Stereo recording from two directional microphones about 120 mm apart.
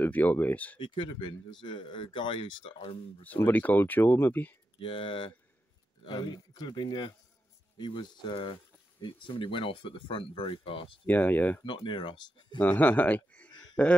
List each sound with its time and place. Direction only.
0.0 s speech: 15° left (ahead or behind)
0.7 s speech: 40° left (ahead or behind)
2.8 s speech: 60° left (ahead or behind)
3.3 s speech: 15° left (ahead or behind)
4.7 s speech: 45° left (ahead or behind)
11.1 s speech: 15° left (ahead or behind)
11.6 s speech: 40° left (ahead or behind)
12.5 s speech: 15° left (ahead or behind)